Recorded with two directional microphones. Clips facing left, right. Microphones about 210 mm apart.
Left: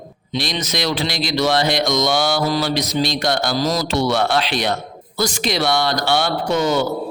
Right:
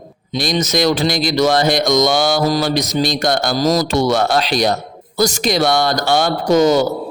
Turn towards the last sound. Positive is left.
turn(degrees=-40)  # may be behind; listen again after turning